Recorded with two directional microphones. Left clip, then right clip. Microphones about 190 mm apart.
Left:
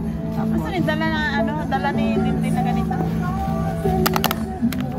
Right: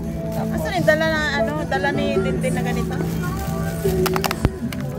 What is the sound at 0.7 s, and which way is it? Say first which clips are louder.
Speech: right 6 dB; 65° right (ahead or behind).